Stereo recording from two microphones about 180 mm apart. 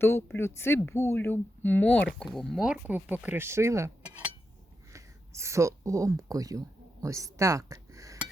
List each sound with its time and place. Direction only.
0.0 s speech: 10° left (ahead or behind); by 8.2 s 20° right (ahead or behind)